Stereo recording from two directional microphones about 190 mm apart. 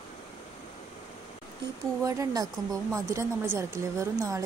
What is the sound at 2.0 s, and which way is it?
Speech, 15° right (ahead or behind).